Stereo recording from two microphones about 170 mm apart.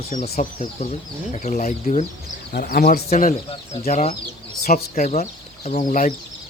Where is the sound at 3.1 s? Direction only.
50° left (ahead or behind).